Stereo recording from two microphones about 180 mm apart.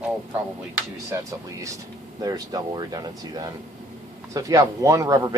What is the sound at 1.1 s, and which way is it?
Speech, 15° right (ahead or behind).